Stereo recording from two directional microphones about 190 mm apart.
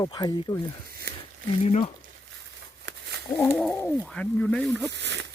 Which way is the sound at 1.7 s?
35° left (ahead or behind).